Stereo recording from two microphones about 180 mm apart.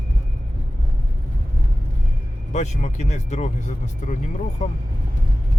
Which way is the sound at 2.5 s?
40° left (ahead or behind).